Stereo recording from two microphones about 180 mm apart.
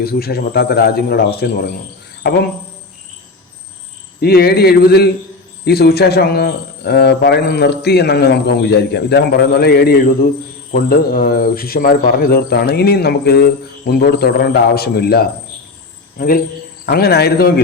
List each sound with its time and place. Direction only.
0.0 s speech: 60° left (ahead or behind)
4.2 s speech: 60° left (ahead or behind)